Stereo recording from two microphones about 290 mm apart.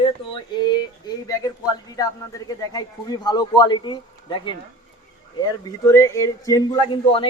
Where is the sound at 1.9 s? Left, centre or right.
Centre.